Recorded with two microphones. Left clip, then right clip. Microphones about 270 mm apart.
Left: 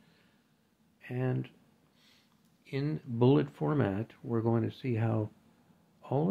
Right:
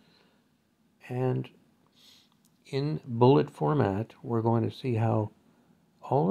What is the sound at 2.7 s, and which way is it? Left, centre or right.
Speech, centre.